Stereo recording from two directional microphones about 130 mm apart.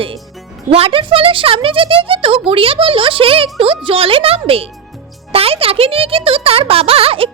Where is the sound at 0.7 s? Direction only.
45° right (ahead or behind).